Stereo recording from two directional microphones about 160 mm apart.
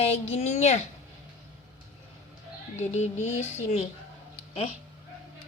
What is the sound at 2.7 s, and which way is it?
Speech, 45° left (ahead or behind).